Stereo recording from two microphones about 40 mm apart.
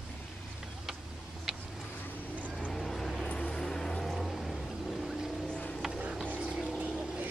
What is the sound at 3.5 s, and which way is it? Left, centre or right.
Vehicle, centre.